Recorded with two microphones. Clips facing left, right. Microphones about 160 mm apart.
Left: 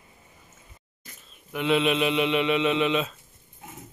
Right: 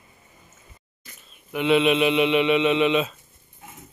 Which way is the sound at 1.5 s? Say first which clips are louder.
Right 4 dB; 5° right (ahead or behind).